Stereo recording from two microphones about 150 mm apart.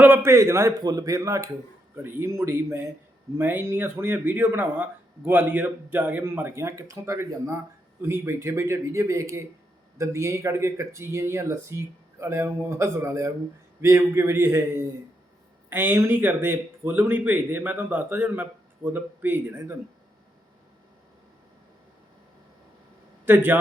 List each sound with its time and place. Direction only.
0.0 s speech: 15° right (ahead or behind)
15.7 s speech: 15° right (ahead or behind)
23.2 s a man's voice: 15° right (ahead or behind)